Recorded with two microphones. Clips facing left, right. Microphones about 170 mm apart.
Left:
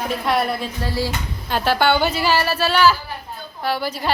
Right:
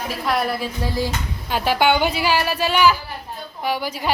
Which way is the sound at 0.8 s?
15° right (ahead or behind).